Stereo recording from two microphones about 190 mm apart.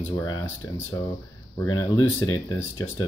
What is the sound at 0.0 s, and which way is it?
Speech, 15° left (ahead or behind).